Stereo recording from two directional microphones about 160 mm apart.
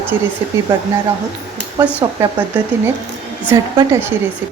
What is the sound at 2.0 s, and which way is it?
Speech, 25° right (ahead or behind).